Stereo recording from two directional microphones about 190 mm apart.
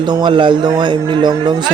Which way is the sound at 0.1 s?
25° right (ahead or behind).